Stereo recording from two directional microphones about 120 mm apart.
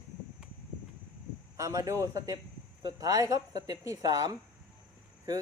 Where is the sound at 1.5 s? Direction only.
25° right (ahead or behind).